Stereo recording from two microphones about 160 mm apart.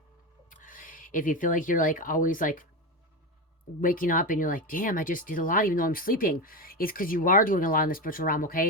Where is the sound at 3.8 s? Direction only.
60° left (ahead or behind).